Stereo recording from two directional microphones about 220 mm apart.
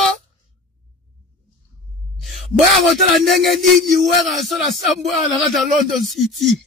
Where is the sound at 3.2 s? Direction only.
Centre (ahead or behind).